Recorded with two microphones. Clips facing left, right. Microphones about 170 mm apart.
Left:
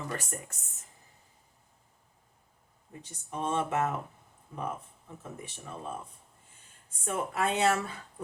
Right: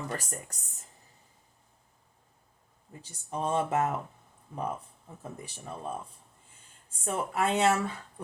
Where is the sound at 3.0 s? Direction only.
35° right (ahead or behind).